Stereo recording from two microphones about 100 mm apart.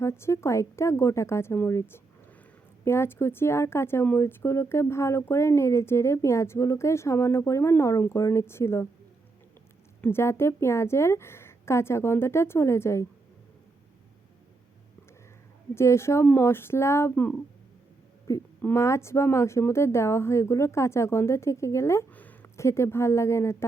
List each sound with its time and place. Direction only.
0.0 s a woman's voice: 25° left (ahead or behind)
10.0 s a woman's voice: 25° left (ahead or behind)
15.7 s a woman's voice: 25° left (ahead or behind)
18.3 s a woman's voice: 30° left (ahead or behind)
22.1 s a sound: 15° left (ahead or behind)
22.5 s a woman's voice: 30° left (ahead or behind)